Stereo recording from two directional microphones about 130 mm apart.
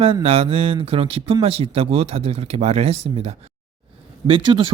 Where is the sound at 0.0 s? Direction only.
50° right (ahead or behind).